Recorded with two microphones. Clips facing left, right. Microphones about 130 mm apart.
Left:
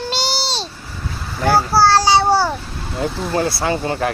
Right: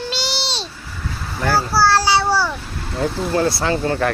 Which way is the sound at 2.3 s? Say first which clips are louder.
Left 3 dB; 45° left (ahead or behind).